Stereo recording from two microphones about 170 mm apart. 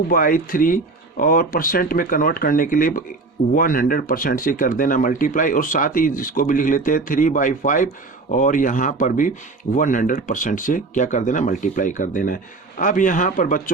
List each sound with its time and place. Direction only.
0.1 s speech: 55° left (ahead or behind)